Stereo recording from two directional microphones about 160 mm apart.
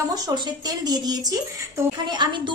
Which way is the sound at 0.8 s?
25° right (ahead or behind).